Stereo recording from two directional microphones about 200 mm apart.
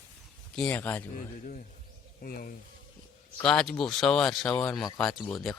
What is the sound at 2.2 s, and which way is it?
Speech, 50° left (ahead or behind).